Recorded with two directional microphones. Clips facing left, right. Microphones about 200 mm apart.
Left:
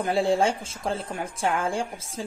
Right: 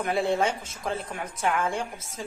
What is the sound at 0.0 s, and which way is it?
A woman's voice, 30° left (ahead or behind).